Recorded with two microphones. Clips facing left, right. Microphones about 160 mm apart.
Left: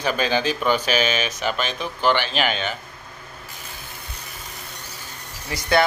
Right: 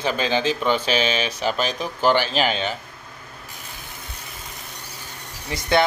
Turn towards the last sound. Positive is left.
turn(degrees=-20)  # may be behind; listen again after turning